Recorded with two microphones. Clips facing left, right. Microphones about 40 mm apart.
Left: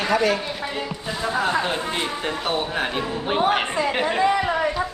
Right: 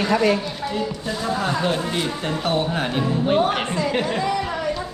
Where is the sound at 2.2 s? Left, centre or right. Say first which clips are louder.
Right 2 dB; centre.